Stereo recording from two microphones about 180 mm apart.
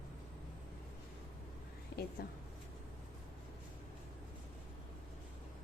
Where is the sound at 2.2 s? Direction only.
60° left (ahead or behind).